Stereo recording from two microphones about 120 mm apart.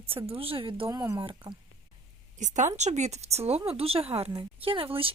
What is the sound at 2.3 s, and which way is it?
Speech, 85° right.